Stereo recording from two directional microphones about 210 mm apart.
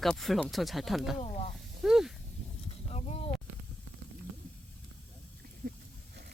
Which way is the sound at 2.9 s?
30° left (ahead or behind).